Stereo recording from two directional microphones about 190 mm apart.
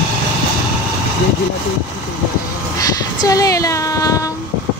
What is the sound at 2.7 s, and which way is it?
Speech, 20° left (ahead or behind).